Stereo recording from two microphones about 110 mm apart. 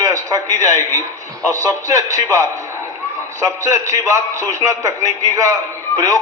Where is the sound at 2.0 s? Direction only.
30° right (ahead or behind).